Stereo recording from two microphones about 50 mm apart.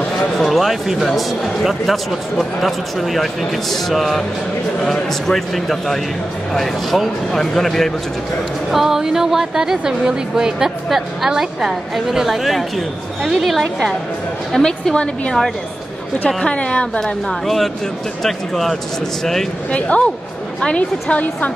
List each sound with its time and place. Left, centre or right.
0.4 s a man's voice: centre
3.9 s a man's voice: centre
5.2 s a man's voice: centre
8.7 s a woman's voice: centre
14.5 s a woman's voice: centre
17.0 s a man's voice: centre
19.7 s a woman's voice: left